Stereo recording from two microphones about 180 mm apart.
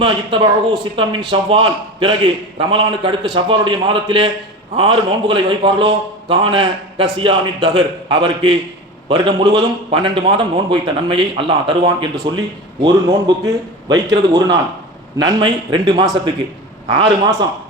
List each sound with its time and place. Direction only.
0.0 s a man's voice: 30° right (ahead or behind)